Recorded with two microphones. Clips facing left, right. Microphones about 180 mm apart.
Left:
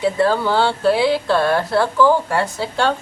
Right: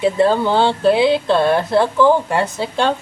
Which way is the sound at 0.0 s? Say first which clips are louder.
Right 2 dB; 20° right (ahead or behind).